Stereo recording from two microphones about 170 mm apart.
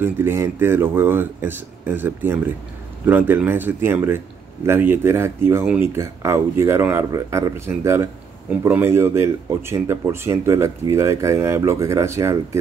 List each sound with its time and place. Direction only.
0.0 s speech: 15° right (ahead or behind)